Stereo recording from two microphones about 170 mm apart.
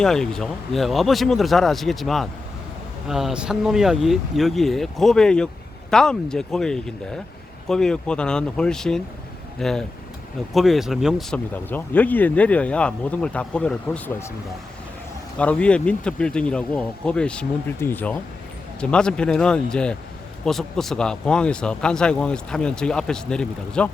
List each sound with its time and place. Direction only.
0.0 s speech: 5° left (ahead or behind)
15.4 s speech: 5° left (ahead or behind)